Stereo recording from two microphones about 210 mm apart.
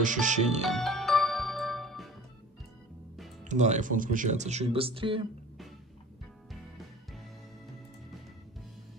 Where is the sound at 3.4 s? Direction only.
35° right (ahead or behind).